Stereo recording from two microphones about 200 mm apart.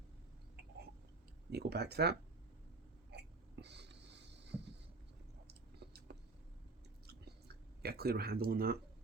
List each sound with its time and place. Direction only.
1.5 s speech: 55° right (ahead or behind)
3.1 s hiccup: 55° right (ahead or behind)
5.5 s a sound: 55° right (ahead or behind)
7.1 s chewing: 55° right (ahead or behind)